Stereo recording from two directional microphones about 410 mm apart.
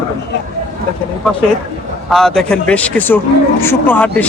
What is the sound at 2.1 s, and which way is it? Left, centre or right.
A man's voice, centre.